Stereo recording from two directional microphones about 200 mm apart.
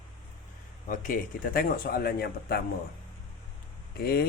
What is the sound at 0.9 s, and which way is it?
Speech, 40° left (ahead or behind).